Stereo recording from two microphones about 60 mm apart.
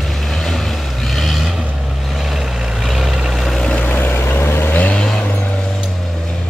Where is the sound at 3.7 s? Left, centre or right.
Left.